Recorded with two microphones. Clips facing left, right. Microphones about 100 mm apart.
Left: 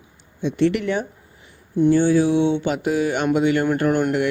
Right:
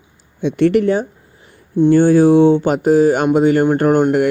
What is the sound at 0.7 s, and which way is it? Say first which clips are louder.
Speech: right 9 dB; 35° right (ahead or behind).